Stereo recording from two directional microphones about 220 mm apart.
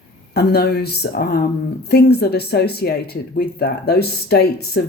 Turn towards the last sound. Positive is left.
turn(degrees=45)  # may be behind; listen again after turning